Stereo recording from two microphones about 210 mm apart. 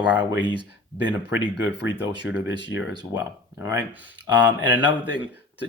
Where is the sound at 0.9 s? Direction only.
60° left (ahead or behind).